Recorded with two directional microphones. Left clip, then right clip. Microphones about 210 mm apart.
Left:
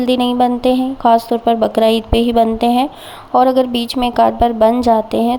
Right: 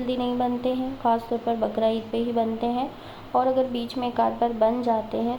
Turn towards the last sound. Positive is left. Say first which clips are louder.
# left 11 dB
turn(degrees=50)  # may be behind; listen again after turning